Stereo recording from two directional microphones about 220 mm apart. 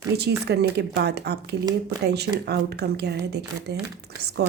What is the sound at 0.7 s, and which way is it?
Speech, 50° right (ahead or behind).